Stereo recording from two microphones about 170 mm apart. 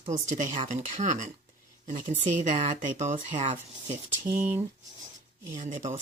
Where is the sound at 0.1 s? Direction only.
45° right (ahead or behind).